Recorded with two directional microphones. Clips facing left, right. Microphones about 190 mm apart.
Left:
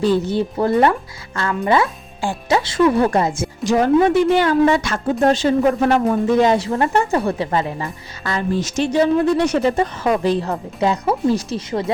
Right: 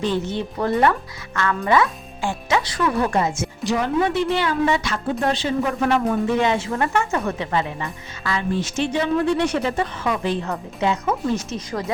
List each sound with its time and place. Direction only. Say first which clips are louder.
0.0 s a woman's voice: left 6 dB; 35° left (ahead or behind)
3.6 s a woman's voice: left 7 dB; 45° left (ahead or behind); by 11.9 s 30° left (ahead or behind)